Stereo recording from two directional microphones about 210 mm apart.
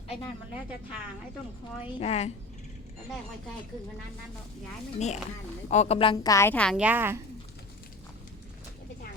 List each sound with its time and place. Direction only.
2.0 s a woman's voice: 30° left (ahead or behind)
4.9 s a woman's voice: 30° left (ahead or behind); by 7.2 s 10° right (ahead or behind)